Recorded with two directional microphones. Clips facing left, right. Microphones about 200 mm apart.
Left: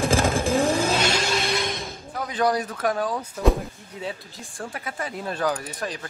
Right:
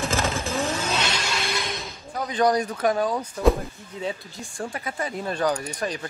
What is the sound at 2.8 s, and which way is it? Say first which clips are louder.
Speech: right 2 dB; centre (ahead or behind).